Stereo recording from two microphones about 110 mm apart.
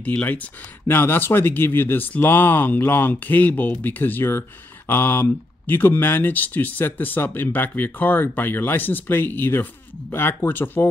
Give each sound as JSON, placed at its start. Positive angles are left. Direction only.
{"t": 0.0, "sound": "speech", "side_deg": 15}